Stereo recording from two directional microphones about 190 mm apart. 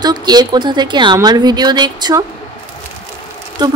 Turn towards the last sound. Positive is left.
turn(degrees=-20)  # may be behind; listen again after turning